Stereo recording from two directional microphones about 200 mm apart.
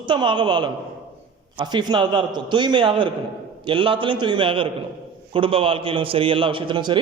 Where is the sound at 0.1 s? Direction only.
25° right (ahead or behind).